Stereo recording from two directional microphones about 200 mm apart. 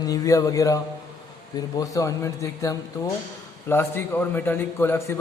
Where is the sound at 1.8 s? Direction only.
15° left (ahead or behind).